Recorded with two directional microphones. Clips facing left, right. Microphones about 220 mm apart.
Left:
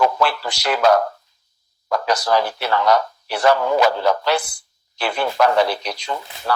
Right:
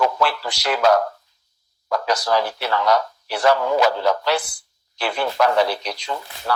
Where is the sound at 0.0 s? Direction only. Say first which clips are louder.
Left 2 dB; 50° left (ahead or behind).